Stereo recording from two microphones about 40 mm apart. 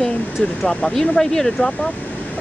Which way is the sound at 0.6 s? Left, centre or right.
Centre.